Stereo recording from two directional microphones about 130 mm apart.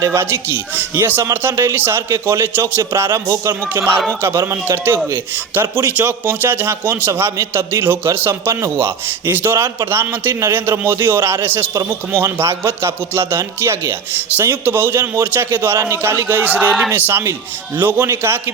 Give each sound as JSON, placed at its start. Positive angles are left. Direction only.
{"t": 0.0, "sound": "a man's voice", "side_deg": -20}